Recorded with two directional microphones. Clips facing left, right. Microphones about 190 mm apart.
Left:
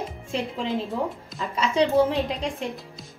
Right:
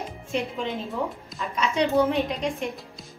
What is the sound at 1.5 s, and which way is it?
Speech, 35° left (ahead or behind).